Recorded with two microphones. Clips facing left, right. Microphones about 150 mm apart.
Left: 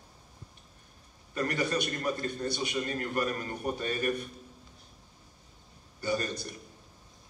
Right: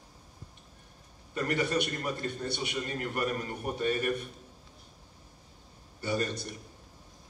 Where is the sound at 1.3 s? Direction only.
20° right (ahead or behind).